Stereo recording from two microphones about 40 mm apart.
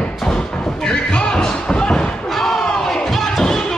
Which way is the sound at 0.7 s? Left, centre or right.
Centre.